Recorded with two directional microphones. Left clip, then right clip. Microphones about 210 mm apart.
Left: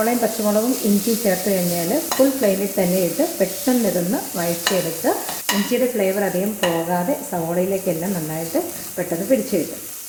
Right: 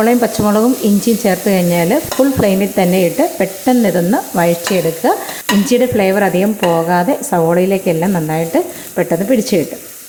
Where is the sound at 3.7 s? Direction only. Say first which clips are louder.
Right 9 dB; 40° right (ahead or behind).